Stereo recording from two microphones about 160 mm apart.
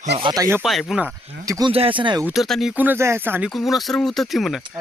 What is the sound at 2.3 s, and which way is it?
Speech, centre (ahead or behind).